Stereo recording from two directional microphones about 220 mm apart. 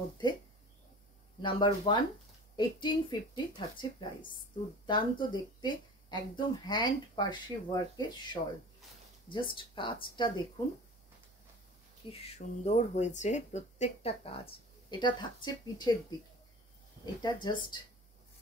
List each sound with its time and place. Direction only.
1.4 s speech: 20° left (ahead or behind)
4.8 s speech: 20° left (ahead or behind)
12.1 s speech: 25° left (ahead or behind)
17.0 s speech: 20° left (ahead or behind)